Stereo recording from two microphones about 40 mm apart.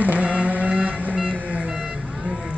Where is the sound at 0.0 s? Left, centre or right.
Right.